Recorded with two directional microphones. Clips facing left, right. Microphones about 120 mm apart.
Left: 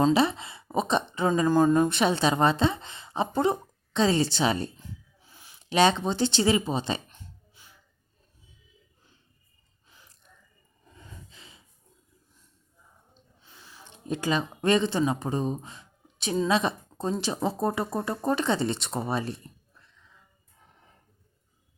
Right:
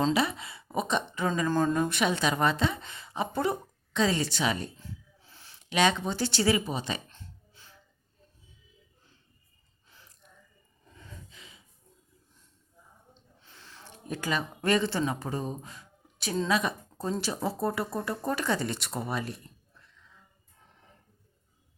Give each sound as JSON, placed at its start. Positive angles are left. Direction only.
{"t": 0.1, "sound": "a woman's voice", "side_deg": 30}
{"t": 1.5, "sound": "speech", "side_deg": 15}
{"t": 1.9, "sound": "speech", "side_deg": 30}
{"t": 4.8, "sound": "snort", "side_deg": 15}
{"t": 5.6, "sound": "speech", "side_deg": 30}
{"t": 7.1, "sound": "a sound", "side_deg": 15}
{"t": 11.3, "sound": "gasp", "side_deg": 30}
{"t": 13.4, "sound": "gasp", "side_deg": 10}
{"t": 13.8, "sound": "speech", "side_deg": 20}